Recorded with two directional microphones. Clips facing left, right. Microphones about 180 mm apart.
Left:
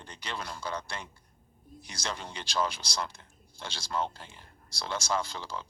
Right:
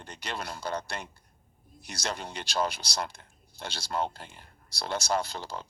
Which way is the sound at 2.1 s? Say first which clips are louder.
Right 1 dB; 45° right (ahead or behind).